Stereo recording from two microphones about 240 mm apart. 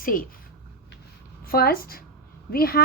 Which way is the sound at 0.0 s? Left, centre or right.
Left.